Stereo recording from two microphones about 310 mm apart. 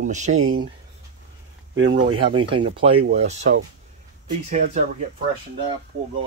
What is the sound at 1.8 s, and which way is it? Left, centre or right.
Speech, centre.